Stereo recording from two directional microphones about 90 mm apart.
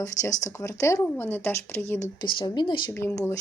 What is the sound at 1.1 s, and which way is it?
Speech, 25° left (ahead or behind).